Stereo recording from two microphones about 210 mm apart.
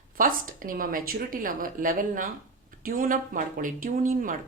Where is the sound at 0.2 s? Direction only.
40° right (ahead or behind).